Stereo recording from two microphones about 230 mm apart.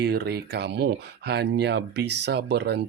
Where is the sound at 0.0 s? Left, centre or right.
Right.